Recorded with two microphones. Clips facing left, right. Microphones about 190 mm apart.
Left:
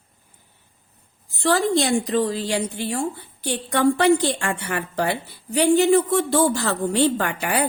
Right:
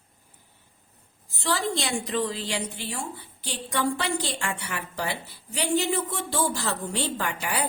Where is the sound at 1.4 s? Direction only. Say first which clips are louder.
Left 8 dB; 50° left (ahead or behind).